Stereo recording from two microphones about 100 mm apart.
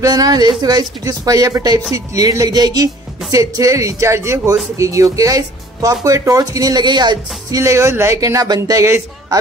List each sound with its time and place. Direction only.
0.0 s speech: 40° right (ahead or behind)
7.6 s a man's voice: 30° right (ahead or behind)